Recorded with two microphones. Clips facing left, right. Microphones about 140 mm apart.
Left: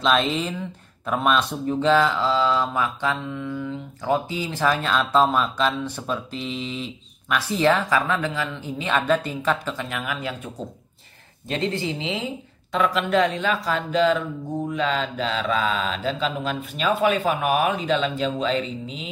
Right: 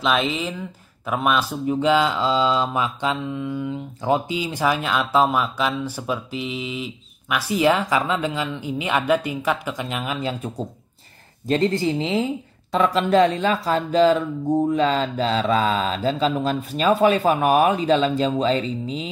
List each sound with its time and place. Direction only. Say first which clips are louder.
0.0 s speech: even; 5° right (ahead or behind); by 10.5 s 25° right (ahead or behind)
11.4 s mantra: right 6 dB; 40° right (ahead or behind)